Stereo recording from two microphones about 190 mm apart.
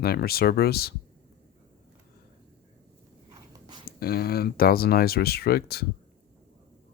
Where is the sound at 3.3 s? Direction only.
20° right (ahead or behind).